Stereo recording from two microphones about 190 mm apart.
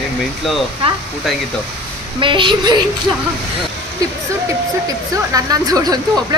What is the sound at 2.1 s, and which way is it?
Speech, 25° right (ahead or behind).